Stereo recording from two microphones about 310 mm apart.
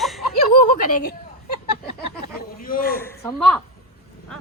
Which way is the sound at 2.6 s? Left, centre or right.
Left.